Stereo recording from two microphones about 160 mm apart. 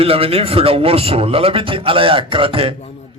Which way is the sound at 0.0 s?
35° right (ahead or behind).